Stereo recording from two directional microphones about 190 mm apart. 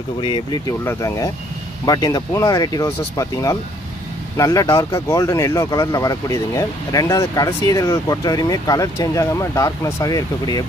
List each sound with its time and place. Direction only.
0.2 s speech: 25° left (ahead or behind)